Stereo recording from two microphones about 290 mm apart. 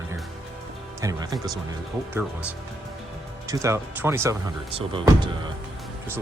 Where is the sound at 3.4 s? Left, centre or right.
Centre.